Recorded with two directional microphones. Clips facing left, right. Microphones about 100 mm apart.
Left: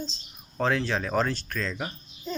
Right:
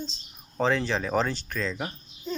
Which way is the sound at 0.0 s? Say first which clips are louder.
Left 1 dB; 15° right (ahead or behind).